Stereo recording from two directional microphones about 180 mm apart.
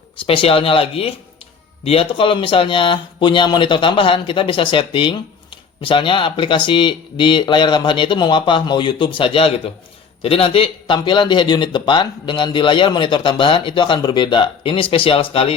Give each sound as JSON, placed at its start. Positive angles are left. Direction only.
{"t": 0.3, "sound": "speech", "side_deg": 30}